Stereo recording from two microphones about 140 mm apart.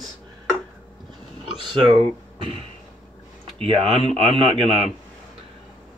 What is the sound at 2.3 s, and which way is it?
Speech, 40° right (ahead or behind).